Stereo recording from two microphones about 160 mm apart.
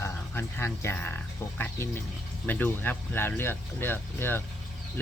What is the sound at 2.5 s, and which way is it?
Speech, 10° left (ahead or behind).